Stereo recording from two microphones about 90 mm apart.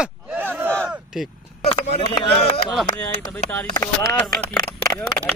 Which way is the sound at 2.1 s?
60° left (ahead or behind).